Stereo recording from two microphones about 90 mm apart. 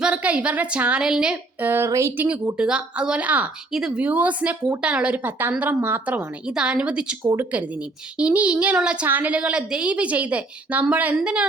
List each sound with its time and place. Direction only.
0.0 s a woman's voice: 15° right (ahead or behind)
1.6 s speech: 25° right (ahead or behind)
2.2 s speech: 10° right (ahead or behind)